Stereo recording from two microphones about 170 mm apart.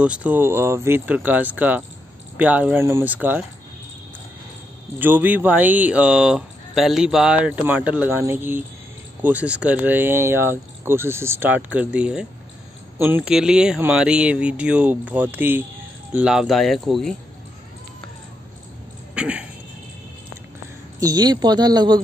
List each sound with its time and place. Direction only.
0.0 s speech: 5° right (ahead or behind)
4.9 s speech: 10° right (ahead or behind)
19.1 s a sound: 10° right (ahead or behind)
21.0 s a woman's voice: 25° right (ahead or behind)